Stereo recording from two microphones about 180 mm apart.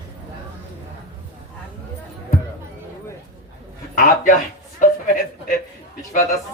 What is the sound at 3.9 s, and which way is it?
Speech, 50° left (ahead or behind).